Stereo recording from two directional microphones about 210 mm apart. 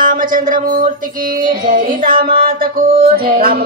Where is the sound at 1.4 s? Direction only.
20° right (ahead or behind).